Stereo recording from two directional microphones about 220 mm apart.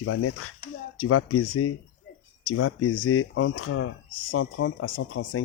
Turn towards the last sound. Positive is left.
turn(degrees=65)  # may be behind; listen again after turning